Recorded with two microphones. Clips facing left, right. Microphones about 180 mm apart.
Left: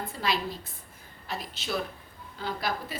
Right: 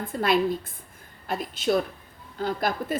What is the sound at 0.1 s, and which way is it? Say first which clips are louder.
A woman's voice: right 10 dB; 55° right (ahead or behind).